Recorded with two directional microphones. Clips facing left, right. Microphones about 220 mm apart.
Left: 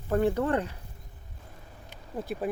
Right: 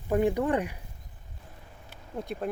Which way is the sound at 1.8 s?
5° left (ahead or behind).